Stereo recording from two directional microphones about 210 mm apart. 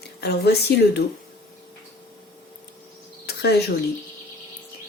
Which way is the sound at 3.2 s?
50° left (ahead or behind).